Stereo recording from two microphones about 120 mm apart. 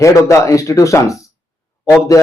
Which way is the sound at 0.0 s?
25° left (ahead or behind).